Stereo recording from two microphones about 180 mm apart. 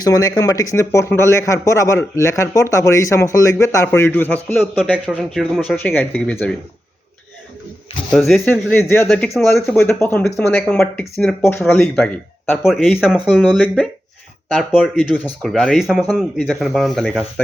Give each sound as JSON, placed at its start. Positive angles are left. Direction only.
{"t": 0.0, "sound": "speech", "side_deg": 20}
{"t": 5.1, "sound": "speech", "side_deg": 0}
{"t": 5.7, "sound": "speech", "side_deg": 10}
{"t": 8.1, "sound": "speech", "side_deg": 0}
{"t": 15.1, "sound": "speech", "side_deg": 5}